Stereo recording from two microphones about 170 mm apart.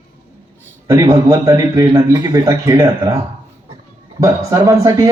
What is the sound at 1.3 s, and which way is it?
A man's voice, 20° right (ahead or behind).